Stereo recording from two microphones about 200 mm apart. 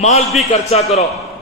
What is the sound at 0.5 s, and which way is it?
Speech, 30° left (ahead or behind).